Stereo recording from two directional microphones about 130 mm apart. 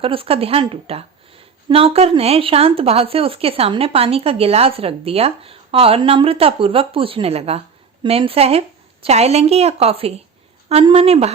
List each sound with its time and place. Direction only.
0.0 s a woman's voice: 45° right (ahead or behind)